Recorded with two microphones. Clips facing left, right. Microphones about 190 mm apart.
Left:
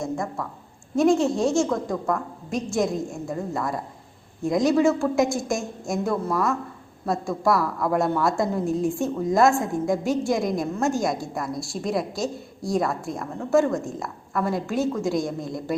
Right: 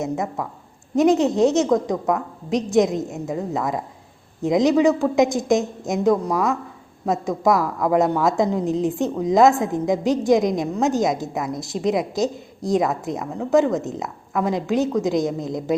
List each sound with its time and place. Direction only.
0.0 s a woman's voice: 20° right (ahead or behind)